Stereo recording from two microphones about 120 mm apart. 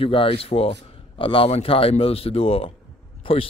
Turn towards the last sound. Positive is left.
turn(degrees=50)  # may be behind; listen again after turning